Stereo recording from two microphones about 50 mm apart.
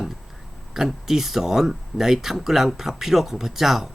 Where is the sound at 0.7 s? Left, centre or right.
Centre.